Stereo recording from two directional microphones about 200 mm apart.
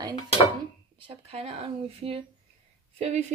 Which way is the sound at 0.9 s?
30° right (ahead or behind).